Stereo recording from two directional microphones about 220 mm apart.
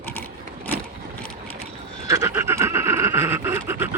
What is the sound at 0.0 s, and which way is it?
Mechanisms, 10° left (ahead or behind).